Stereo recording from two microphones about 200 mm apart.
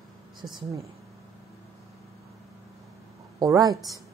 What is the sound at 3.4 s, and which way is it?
Speech, 20° right (ahead or behind).